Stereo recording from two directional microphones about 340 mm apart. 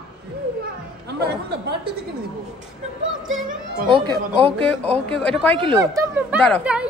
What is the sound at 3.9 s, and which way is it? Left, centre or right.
Speech, centre.